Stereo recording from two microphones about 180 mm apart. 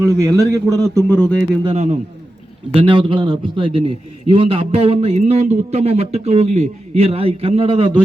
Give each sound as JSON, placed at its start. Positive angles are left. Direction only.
{"t": 0.1, "sound": "a man's voice", "side_deg": -15}
{"t": 1.0, "sound": "speech", "side_deg": 5}
{"t": 1.6, "sound": "speech", "side_deg": -35}
{"t": 2.7, "sound": "a man's voice", "side_deg": -25}